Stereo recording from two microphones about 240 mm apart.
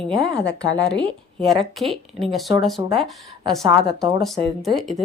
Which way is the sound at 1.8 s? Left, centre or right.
Centre.